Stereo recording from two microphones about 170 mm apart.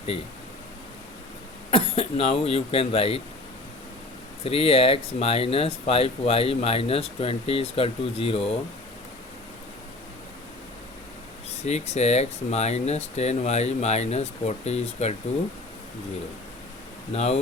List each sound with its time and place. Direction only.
1.7 s speech: 35° left (ahead or behind)
4.4 s speech: 35° left (ahead or behind)
11.5 s speech: 40° left (ahead or behind)
17.1 s speech: 40° left (ahead or behind)